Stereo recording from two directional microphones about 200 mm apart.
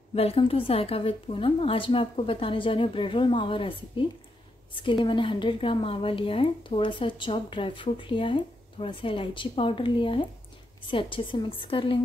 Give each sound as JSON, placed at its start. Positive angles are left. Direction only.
{"t": 0.1, "sound": "a woman's voice", "side_deg": 30}